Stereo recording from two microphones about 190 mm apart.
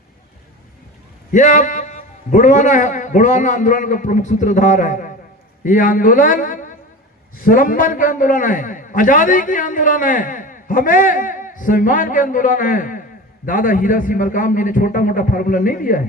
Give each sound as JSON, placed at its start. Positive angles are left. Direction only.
{"t": 1.3, "sound": "a man's voice", "side_deg": 40}